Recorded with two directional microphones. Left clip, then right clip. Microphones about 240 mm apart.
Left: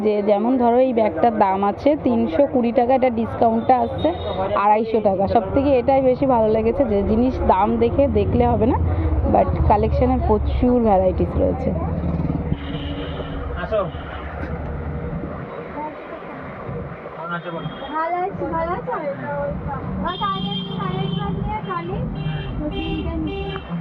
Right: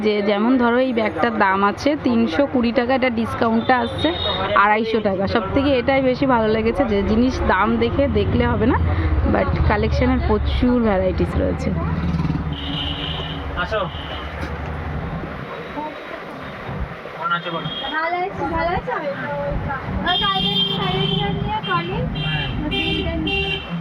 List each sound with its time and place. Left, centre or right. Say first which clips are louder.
0.0 s a woman's voice: left 1 dB; right